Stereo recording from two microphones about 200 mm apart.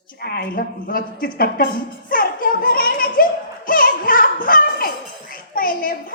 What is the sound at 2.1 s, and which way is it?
Music, 45° left (ahead or behind).